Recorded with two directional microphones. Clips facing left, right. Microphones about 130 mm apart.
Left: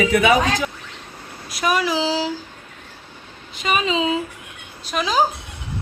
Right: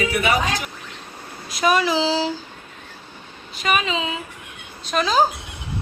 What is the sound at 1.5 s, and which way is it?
Speech, 5° left (ahead or behind).